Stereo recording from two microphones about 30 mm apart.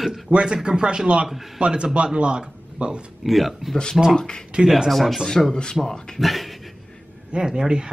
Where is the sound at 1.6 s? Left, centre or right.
Right.